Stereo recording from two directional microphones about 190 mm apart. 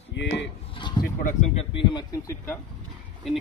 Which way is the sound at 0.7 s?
25° left (ahead or behind).